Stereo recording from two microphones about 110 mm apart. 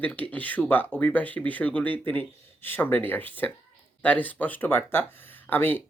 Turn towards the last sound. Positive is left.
turn(degrees=15)  # may be behind; listen again after turning